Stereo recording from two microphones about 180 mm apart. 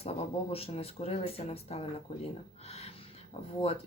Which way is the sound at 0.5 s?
35° left (ahead or behind).